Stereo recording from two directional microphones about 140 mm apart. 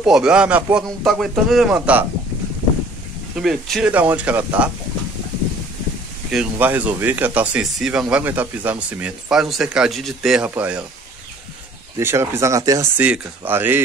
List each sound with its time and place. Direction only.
0.0 s a man's voice: 5° right (ahead or behind)
3.3 s a man's voice: centre (ahead or behind)
3.9 s speech: 10° right (ahead or behind)
6.3 s speech: 10° right (ahead or behind)
12.0 s speech: 15° right (ahead or behind)